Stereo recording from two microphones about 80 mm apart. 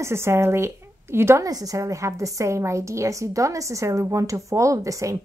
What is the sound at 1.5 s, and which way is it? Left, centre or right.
Speech, right.